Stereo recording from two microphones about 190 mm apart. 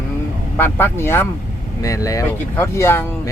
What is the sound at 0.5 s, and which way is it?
Speech, 10° left (ahead or behind).